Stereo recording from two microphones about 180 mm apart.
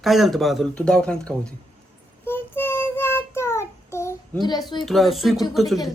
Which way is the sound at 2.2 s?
10° left (ahead or behind).